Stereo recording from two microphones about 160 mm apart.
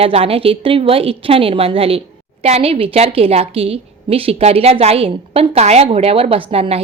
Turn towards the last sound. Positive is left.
turn(degrees=-40)  # may be behind; listen again after turning